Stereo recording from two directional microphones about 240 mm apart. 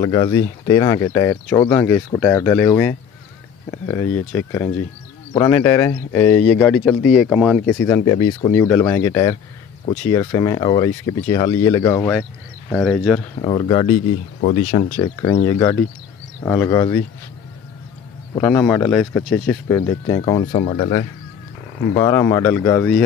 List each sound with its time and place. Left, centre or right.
0.0 s speech: centre
12.7 s speech: centre
13.4 s speech: centre
15.0 s speech: centre
18.3 s speech: centre
19.9 s speech: centre